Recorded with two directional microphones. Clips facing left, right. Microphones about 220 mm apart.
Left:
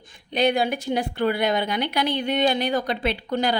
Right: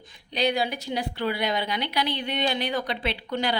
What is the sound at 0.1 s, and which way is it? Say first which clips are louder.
A woman's voice: left 4 dB; 50° left (ahead or behind).